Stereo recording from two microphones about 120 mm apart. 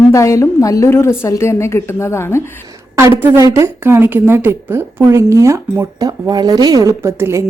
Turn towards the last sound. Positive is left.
turn(degrees=-20)  # may be behind; listen again after turning